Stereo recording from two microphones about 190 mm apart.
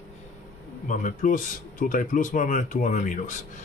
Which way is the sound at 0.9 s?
40° left (ahead or behind).